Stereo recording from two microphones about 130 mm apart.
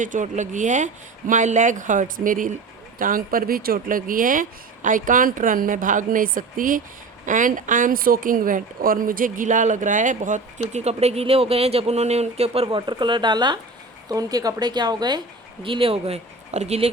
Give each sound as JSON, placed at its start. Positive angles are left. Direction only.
{"t": 0.0, "sound": "a woman's voice", "side_deg": -75}
{"t": 15.6, "sound": "speech", "side_deg": -45}